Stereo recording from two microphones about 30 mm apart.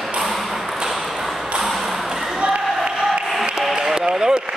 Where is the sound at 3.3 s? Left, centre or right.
Centre.